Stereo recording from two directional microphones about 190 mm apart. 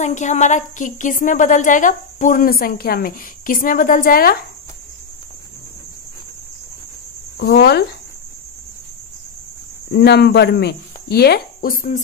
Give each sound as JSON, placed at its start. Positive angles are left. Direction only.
{"t": 0.0, "sound": "a woman's voice", "side_deg": 40}
{"t": 7.3, "sound": "speech", "side_deg": 55}
{"t": 9.9, "sound": "speech", "side_deg": 55}